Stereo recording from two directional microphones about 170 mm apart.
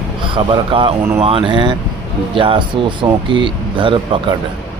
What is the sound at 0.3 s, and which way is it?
A man's voice, 30° right (ahead or behind).